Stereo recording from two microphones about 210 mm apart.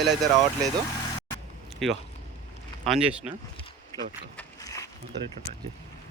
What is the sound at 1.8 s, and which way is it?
Speech, centre (ahead or behind).